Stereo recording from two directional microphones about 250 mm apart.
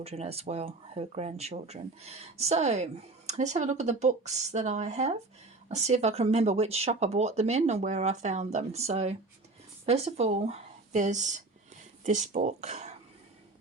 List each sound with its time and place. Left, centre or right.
0.0 s speech: right